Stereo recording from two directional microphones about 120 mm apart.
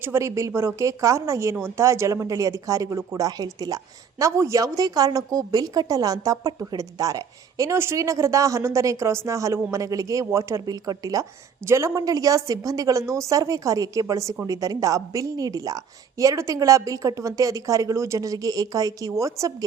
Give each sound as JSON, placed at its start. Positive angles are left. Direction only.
{"t": 0.0, "sound": "a woman's voice", "side_deg": -20}